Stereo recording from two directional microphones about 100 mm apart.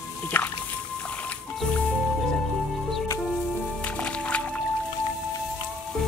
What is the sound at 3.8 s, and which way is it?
Music, 10° left (ahead or behind).